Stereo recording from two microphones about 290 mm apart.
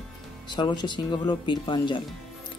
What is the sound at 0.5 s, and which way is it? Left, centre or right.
Speech, centre.